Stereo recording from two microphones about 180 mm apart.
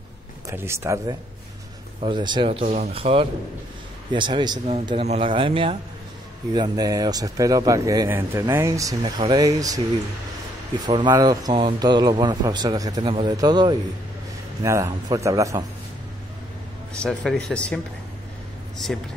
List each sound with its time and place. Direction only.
0.5 s speech: 15° right (ahead or behind)
2.0 s speech: 25° right (ahead or behind)
2.6 s speech: 40° right (ahead or behind); by 9.8 s 20° right (ahead or behind)
10.9 s speech: 25° right (ahead or behind)
17.0 s speech: 5° left (ahead or behind)